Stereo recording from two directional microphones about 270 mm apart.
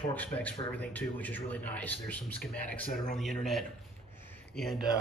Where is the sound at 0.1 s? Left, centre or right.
Centre.